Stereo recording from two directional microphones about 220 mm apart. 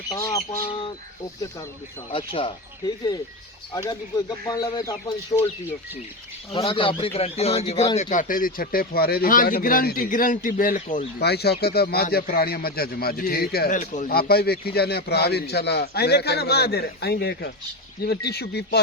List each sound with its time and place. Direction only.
0.2 s speech: 15° left (ahead or behind)
2.1 s a man's voice: 25° left (ahead or behind)
6.6 s a man's voice: 25° left (ahead or behind); by 18.8 s 45° left (ahead or behind)